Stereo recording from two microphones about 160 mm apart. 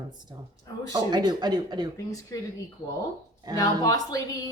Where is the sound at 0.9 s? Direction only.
25° right (ahead or behind).